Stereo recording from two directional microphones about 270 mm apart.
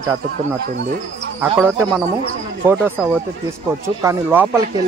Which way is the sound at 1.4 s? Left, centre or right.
Centre.